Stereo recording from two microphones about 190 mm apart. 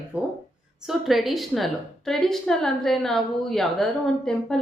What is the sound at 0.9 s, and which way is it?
A woman's voice, centre (ahead or behind).